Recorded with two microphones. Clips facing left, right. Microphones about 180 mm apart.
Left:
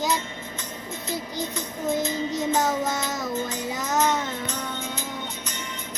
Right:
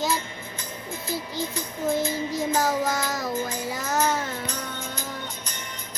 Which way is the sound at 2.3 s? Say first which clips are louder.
Even; 20° left (ahead or behind).